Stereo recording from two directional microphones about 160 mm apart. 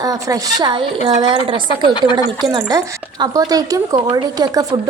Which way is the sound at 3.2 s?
25° right (ahead or behind).